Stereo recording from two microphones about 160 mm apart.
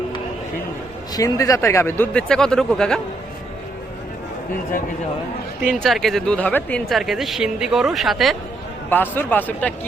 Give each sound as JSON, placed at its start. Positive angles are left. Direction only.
{"t": 1.1, "sound": "speech", "side_deg": 20}
{"t": 5.7, "sound": "speech", "side_deg": 0}
{"t": 8.9, "sound": "speech", "side_deg": 10}